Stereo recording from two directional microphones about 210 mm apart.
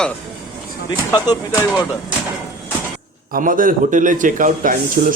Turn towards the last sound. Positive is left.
turn(degrees=-40)  # may be behind; listen again after turning